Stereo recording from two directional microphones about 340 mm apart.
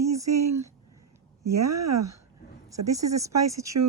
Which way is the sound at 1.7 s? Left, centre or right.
Right.